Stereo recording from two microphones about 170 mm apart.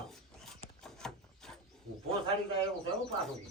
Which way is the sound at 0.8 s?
5° left (ahead or behind).